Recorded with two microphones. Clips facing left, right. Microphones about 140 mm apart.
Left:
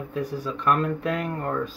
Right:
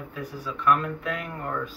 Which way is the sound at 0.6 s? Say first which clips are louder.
Left 1 dB; 40° left (ahead or behind).